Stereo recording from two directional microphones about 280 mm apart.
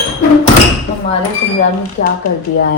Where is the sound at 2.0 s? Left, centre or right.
Left.